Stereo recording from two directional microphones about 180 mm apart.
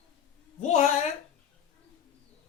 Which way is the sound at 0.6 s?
40° left (ahead or behind).